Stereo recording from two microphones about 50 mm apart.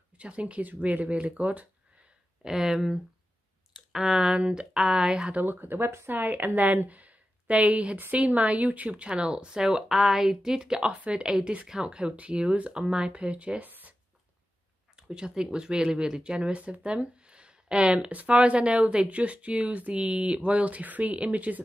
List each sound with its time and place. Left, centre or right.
0.2 s speech: right
2.4 s speech: centre
5.4 s speech: right
13.7 s a sound: right
15.0 s speech: centre; by 21.6 s right